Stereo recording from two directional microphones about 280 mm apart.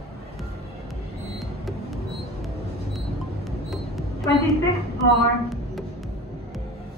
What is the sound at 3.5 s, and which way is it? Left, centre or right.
Music, centre.